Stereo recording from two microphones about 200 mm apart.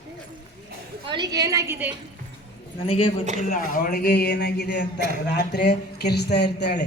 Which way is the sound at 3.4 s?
45° left (ahead or behind).